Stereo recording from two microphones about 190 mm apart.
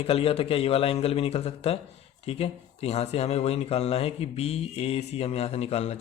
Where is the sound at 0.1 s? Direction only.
30° left (ahead or behind).